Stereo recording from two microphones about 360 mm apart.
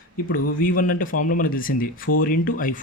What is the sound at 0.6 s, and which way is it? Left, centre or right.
Speech, left.